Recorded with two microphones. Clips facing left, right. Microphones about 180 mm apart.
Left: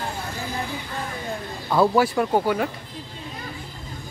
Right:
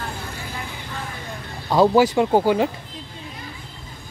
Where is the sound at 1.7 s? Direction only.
15° right (ahead or behind).